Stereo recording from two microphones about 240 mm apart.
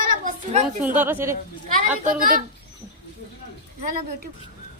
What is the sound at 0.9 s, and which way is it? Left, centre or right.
Speech, centre.